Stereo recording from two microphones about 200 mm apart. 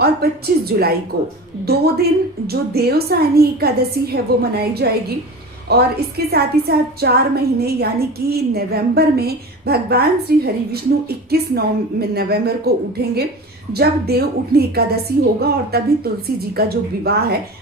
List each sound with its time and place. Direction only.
0.0 s a woman's voice: 50° right (ahead or behind)